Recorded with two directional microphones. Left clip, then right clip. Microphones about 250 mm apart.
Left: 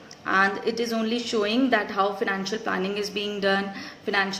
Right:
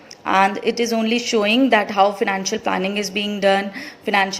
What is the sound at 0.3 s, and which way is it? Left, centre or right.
A woman's voice, right.